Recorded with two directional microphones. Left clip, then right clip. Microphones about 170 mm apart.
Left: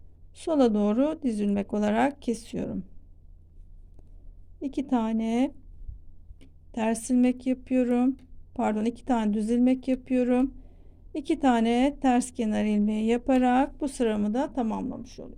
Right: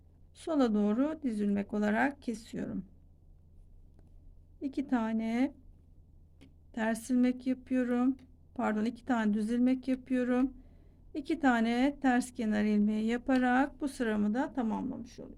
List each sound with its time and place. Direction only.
0.3 s a woman's voice: 25° left (ahead or behind)
4.6 s a woman's voice: 25° left (ahead or behind)